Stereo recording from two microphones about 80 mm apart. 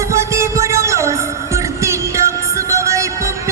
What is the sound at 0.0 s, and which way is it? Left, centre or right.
Music, right.